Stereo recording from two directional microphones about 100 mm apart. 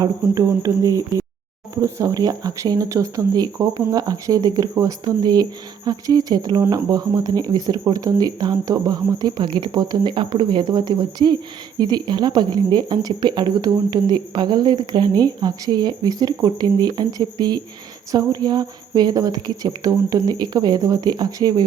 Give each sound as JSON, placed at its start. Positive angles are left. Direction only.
{"t": 0.0, "sound": "speech", "side_deg": -35}